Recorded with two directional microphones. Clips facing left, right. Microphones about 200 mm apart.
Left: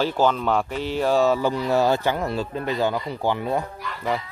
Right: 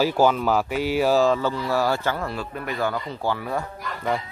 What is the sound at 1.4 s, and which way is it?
Speech, 20° left (ahead or behind).